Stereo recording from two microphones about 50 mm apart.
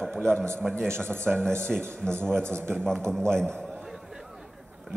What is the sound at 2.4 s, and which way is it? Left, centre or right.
Speech, right.